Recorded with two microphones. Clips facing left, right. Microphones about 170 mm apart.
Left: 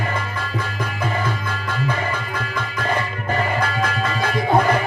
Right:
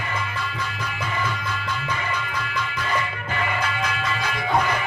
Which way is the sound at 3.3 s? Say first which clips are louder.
Left 5 dB; 40° left (ahead or behind).